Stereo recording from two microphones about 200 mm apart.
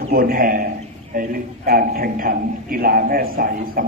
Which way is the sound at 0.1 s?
45° right (ahead or behind).